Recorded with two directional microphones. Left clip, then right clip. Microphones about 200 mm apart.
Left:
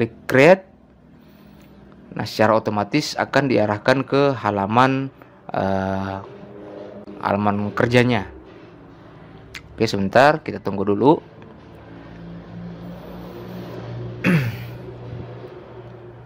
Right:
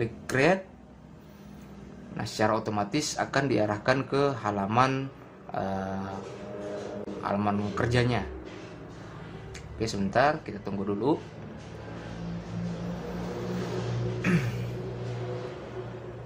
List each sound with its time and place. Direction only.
0.0 s speech: 50° left (ahead or behind)
2.1 s speech: 45° left (ahead or behind)
7.2 s speech: 40° left (ahead or behind)
9.5 s speech: 45° left (ahead or behind)
14.2 s a sound: 40° left (ahead or behind)